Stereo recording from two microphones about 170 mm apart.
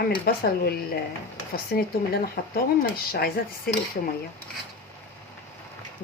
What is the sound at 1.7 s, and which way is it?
A woman's voice, 65° left (ahead or behind).